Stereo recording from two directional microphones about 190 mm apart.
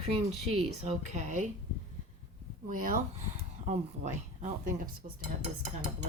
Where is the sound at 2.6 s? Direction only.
45° right (ahead or behind).